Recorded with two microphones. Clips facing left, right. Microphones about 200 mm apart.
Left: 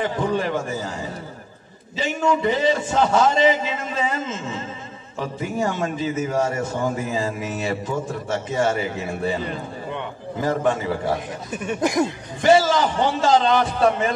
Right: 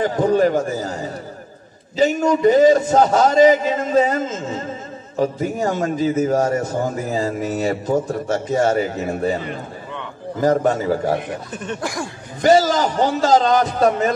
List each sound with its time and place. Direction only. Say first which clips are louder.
0.0 s a man's voice: right 7 dB; 40° right (ahead or behind)
10.4 s a man's voice: right 5 dB; 40° right (ahead or behind)
11.5 s chuckle: left 5 dB; 10° left (ahead or behind)
11.8 s speech: left 9 dB; 20° left (ahead or behind)
12.4 s a man's voice: right 2 dB; 40° right (ahead or behind)